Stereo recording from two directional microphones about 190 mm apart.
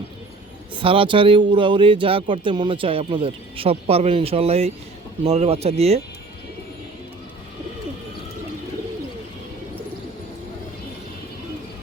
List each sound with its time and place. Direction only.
0.7 s a man's voice: 25° right (ahead or behind)